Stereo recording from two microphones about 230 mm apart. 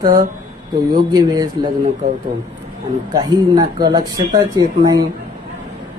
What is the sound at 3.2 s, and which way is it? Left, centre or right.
A man's voice, centre.